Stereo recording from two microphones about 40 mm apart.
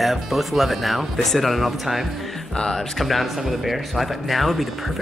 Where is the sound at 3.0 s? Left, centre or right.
Centre.